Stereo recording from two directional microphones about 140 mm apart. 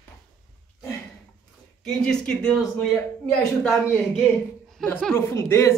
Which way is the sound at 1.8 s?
5° left (ahead or behind).